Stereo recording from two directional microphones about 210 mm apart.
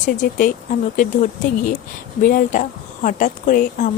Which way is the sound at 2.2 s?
40° left (ahead or behind).